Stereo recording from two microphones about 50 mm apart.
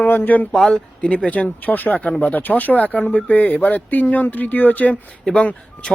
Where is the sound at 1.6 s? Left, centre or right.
Left.